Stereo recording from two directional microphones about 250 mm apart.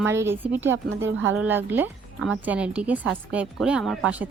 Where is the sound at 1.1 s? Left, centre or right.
Right.